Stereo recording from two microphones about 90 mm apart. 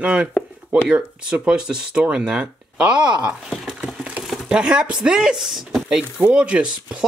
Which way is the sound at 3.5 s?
5° right (ahead or behind).